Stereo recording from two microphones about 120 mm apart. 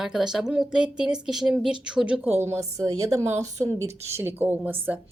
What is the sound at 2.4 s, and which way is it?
A woman's voice, 25° right (ahead or behind).